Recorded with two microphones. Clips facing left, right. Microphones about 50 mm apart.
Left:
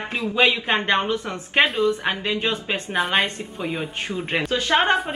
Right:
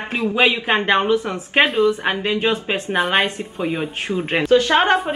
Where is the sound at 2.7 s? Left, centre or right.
Centre.